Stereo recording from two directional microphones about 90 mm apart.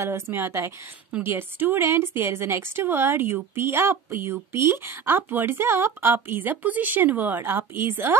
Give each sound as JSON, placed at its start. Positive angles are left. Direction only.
{"t": 0.0, "sound": "speech", "side_deg": -30}